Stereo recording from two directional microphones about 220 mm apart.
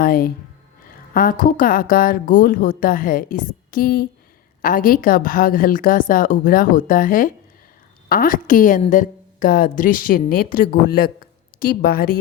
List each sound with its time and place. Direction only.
0.0 s speech: 40° left (ahead or behind)